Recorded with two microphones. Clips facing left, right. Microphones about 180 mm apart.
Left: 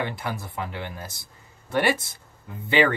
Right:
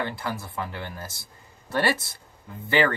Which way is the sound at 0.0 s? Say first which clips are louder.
Even; 20° left (ahead or behind).